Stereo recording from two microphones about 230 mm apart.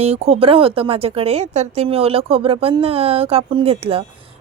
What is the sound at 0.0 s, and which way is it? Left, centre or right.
Speech, right.